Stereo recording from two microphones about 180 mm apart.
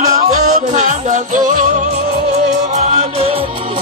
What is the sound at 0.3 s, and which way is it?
Music, 45° right (ahead or behind).